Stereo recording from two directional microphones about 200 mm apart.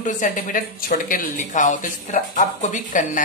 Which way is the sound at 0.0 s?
40° left (ahead or behind).